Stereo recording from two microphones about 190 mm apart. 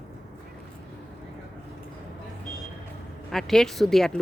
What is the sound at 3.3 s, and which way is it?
Speech, centre (ahead or behind).